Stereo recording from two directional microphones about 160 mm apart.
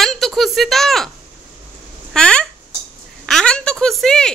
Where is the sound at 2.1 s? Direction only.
5° left (ahead or behind).